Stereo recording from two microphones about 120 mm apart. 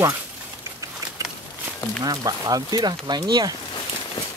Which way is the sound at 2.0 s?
30° right (ahead or behind).